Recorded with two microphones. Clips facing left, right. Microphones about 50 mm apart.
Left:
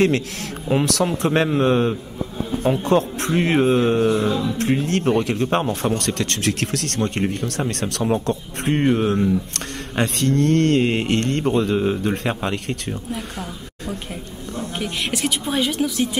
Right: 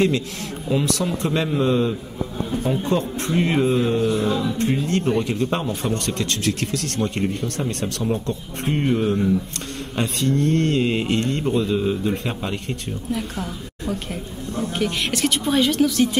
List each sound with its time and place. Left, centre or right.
0.7 s a man's voice: left
4.3 s a sound: centre
4.6 s a man's voice: left
9.9 s a man's voice: left
13.1 s a woman's voice: centre